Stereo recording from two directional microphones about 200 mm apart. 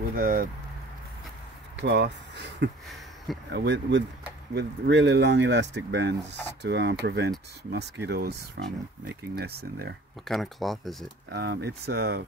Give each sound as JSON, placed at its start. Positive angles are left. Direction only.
{"t": 0.1, "sound": "speech", "side_deg": -45}
{"t": 1.8, "sound": "speech", "side_deg": -55}
{"t": 10.2, "sound": "speech", "side_deg": 0}
{"t": 11.2, "sound": "speech", "side_deg": -55}